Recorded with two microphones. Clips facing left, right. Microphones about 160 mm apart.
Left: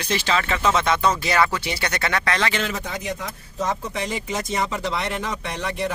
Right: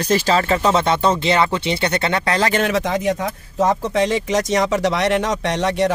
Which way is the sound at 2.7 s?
90° right.